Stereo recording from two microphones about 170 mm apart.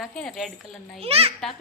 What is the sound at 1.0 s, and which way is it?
Speech, 35° right (ahead or behind).